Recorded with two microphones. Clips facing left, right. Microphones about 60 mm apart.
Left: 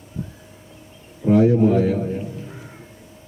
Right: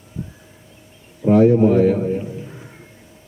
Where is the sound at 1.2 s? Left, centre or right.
Right.